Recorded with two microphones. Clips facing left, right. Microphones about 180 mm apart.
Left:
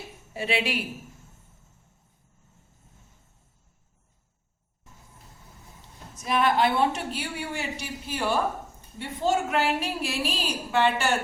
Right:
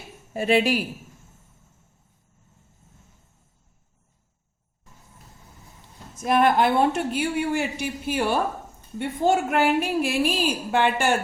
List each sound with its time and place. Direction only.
0.3 s a woman's voice: 45° right (ahead or behind)
6.1 s a woman's voice: 50° right (ahead or behind)